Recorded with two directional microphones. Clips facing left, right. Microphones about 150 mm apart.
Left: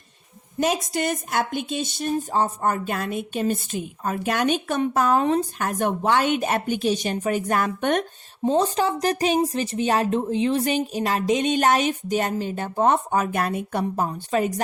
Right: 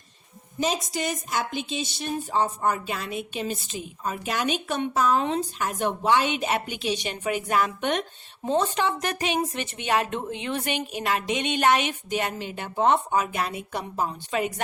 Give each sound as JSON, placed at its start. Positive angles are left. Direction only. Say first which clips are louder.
{"t": 0.6, "sound": "a woman's voice", "louder": "left 4 dB", "side_deg": 60}
{"t": 8.4, "sound": "speech", "louder": "left 3 dB", "side_deg": 35}